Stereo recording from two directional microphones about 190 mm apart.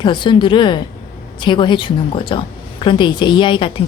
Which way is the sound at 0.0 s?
25° left (ahead or behind).